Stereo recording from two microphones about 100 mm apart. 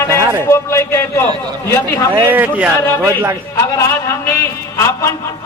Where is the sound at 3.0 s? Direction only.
30° right (ahead or behind).